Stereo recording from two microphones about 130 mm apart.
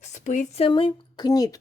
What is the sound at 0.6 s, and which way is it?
Speech, 40° left (ahead or behind).